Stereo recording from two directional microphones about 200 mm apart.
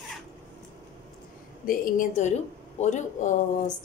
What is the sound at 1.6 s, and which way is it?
A woman's voice, 45° left (ahead or behind).